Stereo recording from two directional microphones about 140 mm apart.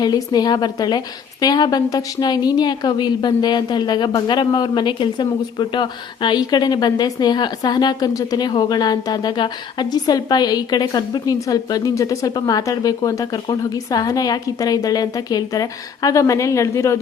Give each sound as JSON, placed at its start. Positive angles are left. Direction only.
{"t": 0.0, "sound": "a woman's voice", "side_deg": 30}